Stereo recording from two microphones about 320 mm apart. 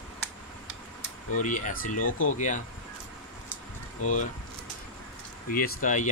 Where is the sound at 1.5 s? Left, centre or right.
Left.